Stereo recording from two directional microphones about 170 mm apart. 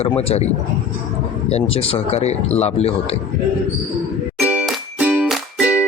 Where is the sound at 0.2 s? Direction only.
35° left (ahead or behind).